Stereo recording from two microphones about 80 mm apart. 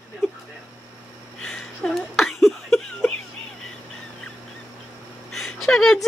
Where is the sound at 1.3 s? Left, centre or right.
Centre.